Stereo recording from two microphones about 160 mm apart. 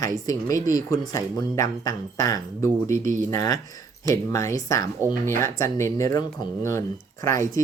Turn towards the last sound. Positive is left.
turn(degrees=20)  # may be behind; listen again after turning